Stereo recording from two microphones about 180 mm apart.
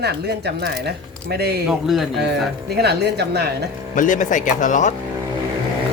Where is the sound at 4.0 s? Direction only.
45° left (ahead or behind).